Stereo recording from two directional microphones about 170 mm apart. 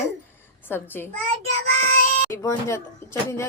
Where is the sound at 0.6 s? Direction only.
10° left (ahead or behind).